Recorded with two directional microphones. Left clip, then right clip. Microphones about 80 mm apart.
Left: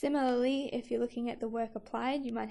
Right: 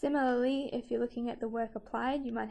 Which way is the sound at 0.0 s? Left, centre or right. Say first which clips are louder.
Even; centre.